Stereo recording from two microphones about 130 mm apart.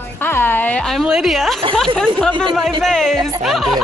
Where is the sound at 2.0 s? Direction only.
10° left (ahead or behind).